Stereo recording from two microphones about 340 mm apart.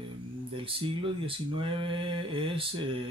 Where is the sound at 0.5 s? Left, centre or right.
Centre.